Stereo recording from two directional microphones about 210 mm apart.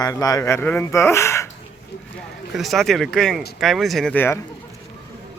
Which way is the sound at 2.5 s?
Centre (ahead or behind).